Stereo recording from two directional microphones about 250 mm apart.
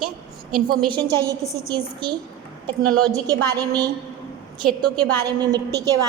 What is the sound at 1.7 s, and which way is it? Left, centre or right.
A woman's voice, centre.